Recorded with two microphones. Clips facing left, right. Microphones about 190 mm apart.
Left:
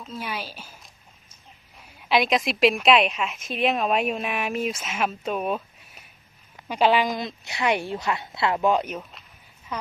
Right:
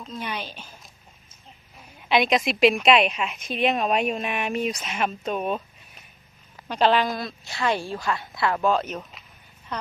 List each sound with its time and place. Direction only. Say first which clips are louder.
0.0 s a woman's voice: even; 5° left (ahead or behind)
2.0 s a woman's voice: right 1 dB; centre (ahead or behind)